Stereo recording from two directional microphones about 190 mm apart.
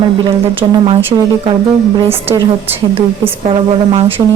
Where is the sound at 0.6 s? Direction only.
25° right (ahead or behind).